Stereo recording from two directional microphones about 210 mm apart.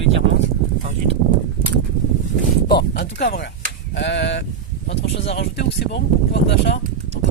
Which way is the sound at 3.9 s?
55° left (ahead or behind).